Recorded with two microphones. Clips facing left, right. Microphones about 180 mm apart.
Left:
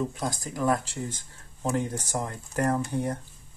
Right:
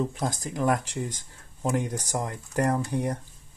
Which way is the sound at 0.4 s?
20° right (ahead or behind).